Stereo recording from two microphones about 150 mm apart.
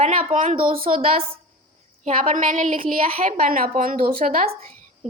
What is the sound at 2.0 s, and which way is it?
A woman's voice, 60° right (ahead or behind).